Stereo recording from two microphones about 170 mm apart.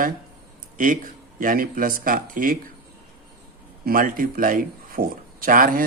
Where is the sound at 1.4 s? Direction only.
55° right (ahead or behind).